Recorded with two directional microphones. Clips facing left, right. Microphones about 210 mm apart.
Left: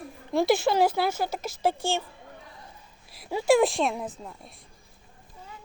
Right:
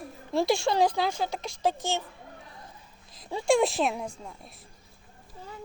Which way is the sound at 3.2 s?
5° left (ahead or behind).